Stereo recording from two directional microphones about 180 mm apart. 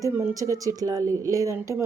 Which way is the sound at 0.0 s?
10° right (ahead or behind).